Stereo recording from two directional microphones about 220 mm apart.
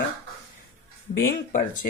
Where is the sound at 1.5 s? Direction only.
35° left (ahead or behind).